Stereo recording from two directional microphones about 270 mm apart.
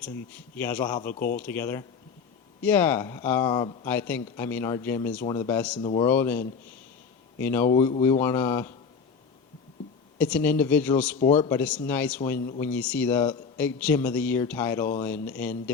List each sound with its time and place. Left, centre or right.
0.5 s a man's voice: centre
5.8 s speech: left
6.1 s a man's voice: centre
10.2 s speech: centre
11.2 s speech: left
11.4 s a man's voice: centre